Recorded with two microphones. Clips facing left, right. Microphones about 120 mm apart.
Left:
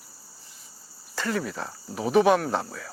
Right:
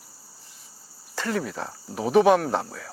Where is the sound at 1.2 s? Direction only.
40° right (ahead or behind).